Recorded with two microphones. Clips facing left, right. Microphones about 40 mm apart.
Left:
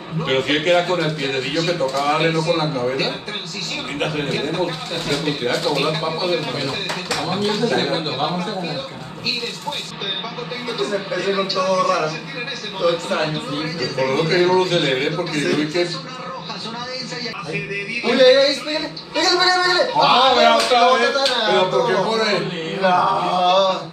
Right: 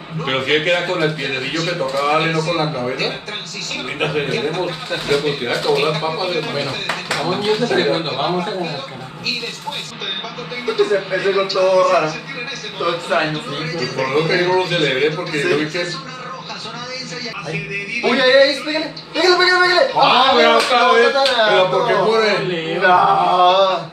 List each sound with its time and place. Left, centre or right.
0.2 s a man's voice: centre
4.3 s a man's voice: centre
6.5 s speech: right
10.9 s a man's voice: centre
18.0 s a man's voice: centre
22.4 s speech: right